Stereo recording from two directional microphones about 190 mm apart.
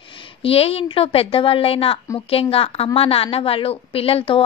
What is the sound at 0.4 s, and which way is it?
A woman's voice, 30° left (ahead or behind).